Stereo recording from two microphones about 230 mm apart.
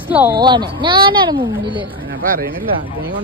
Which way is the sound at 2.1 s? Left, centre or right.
Right.